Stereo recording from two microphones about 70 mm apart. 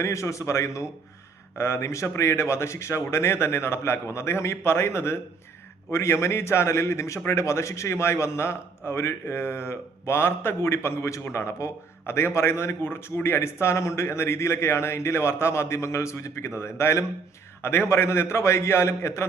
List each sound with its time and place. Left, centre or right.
0.0 s a man's voice: left